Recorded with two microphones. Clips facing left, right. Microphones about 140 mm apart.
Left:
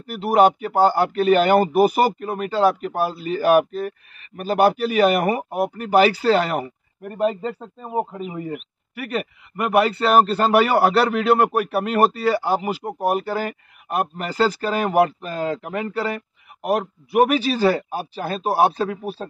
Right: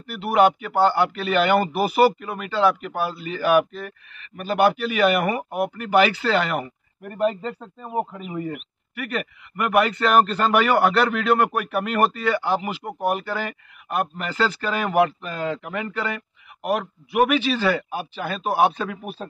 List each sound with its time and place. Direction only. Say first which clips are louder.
0.0 s speech: left 2 dB; 40° left (ahead or behind)
7.1 s a man's voice: left 1 dB; 20° left (ahead or behind)
8.9 s speech: left 2 dB; 30° left (ahead or behind)